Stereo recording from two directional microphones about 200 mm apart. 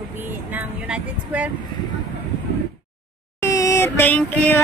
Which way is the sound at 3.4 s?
15° left (ahead or behind).